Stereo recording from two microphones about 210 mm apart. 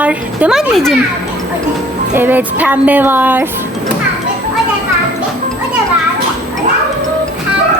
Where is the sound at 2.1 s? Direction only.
10° right (ahead or behind).